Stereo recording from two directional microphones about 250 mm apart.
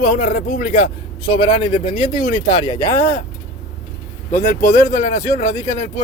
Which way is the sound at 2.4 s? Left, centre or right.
Left.